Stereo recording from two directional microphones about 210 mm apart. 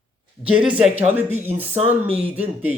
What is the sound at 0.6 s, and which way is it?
Speech, 25° right (ahead or behind).